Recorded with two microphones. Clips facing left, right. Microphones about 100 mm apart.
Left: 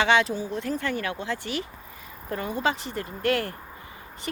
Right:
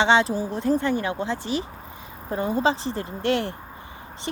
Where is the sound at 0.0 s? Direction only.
30° right (ahead or behind).